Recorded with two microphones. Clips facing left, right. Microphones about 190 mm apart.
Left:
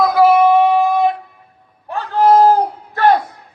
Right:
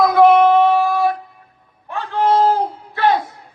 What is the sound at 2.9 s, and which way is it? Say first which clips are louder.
Music: left 3 dB; 45° left (ahead or behind).